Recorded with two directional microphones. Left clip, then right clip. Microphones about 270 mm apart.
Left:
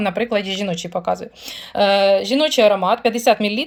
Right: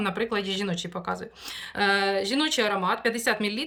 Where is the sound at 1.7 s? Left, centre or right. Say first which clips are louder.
Left 10 dB; centre.